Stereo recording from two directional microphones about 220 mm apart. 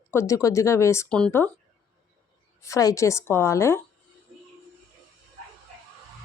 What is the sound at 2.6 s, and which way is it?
Speech, 15° left (ahead or behind).